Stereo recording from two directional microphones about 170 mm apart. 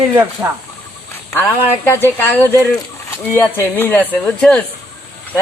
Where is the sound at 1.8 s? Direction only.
15° left (ahead or behind).